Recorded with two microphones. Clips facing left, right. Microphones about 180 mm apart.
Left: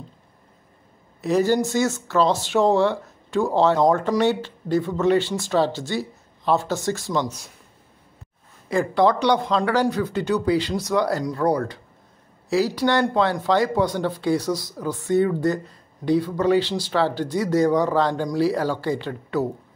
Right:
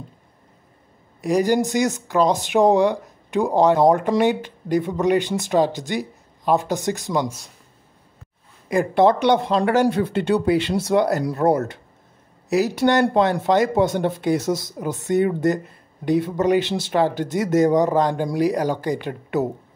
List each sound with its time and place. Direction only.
1.2 s speech: 15° right (ahead or behind)
8.6 s speech: 20° right (ahead or behind)